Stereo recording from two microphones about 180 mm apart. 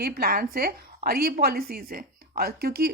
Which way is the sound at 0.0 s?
60° right (ahead or behind).